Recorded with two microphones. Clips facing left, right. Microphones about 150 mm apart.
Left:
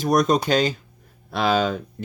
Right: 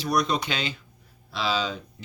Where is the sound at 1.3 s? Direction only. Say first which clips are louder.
Left 7 dB; 55° left (ahead or behind).